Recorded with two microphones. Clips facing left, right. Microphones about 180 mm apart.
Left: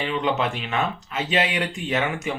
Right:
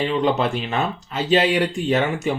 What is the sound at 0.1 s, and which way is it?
Speech, 35° right (ahead or behind).